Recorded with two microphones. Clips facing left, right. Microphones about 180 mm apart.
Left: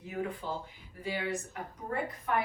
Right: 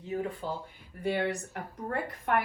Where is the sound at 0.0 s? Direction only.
30° right (ahead or behind).